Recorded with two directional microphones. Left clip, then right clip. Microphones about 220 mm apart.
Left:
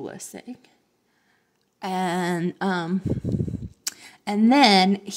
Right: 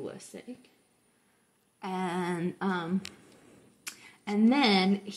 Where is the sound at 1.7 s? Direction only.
35° left (ahead or behind).